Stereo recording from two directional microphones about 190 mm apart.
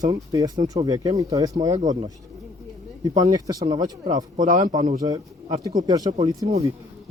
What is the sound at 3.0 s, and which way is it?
Speech, 20° right (ahead or behind).